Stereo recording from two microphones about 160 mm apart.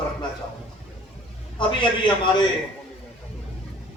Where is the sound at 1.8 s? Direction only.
30° left (ahead or behind).